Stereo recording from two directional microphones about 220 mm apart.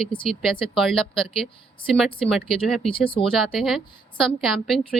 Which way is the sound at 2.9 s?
25° left (ahead or behind).